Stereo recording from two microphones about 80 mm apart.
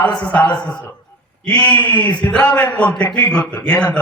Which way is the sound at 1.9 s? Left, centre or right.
Left.